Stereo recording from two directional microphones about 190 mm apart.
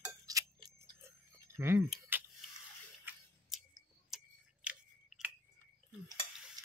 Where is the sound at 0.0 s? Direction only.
20° right (ahead or behind).